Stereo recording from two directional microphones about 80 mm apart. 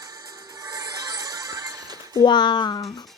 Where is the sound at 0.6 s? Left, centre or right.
Right.